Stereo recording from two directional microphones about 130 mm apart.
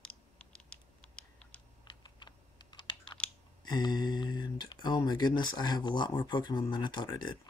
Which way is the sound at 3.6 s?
35° left (ahead or behind).